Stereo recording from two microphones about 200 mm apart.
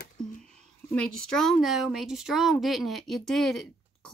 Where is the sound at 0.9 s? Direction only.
5° left (ahead or behind).